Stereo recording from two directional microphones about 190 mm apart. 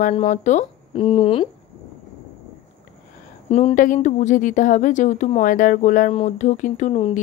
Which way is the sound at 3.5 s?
40° left (ahead or behind).